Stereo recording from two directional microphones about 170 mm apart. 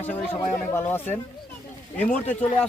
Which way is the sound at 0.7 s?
15° left (ahead or behind).